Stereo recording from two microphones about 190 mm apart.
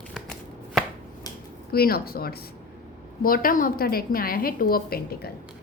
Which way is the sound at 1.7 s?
55° left (ahead or behind).